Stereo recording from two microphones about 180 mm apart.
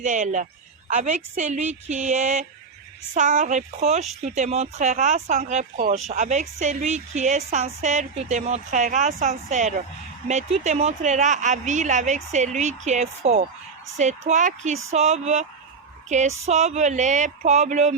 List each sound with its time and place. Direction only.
0.0 s a woman's voice: 45° right (ahead or behind)